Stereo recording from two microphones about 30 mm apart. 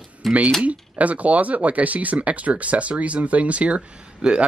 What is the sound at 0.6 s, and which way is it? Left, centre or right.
Speech, right.